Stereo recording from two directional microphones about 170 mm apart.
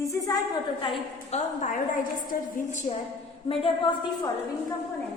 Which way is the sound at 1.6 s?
50° left (ahead or behind).